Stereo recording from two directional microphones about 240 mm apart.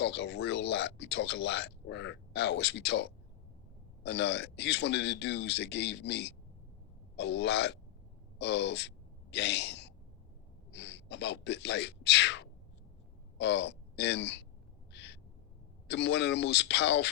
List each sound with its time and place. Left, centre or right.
0.0 s speech: left
9.3 s gasp: left
10.7 s speech: left
14.9 s owl: left
15.9 s speech: left